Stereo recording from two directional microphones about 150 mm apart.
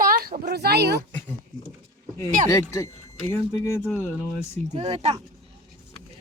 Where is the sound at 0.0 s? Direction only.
75° right (ahead or behind); by 1.0 s 90° right.